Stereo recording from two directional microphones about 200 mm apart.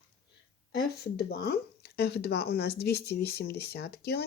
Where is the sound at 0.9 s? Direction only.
55° left (ahead or behind).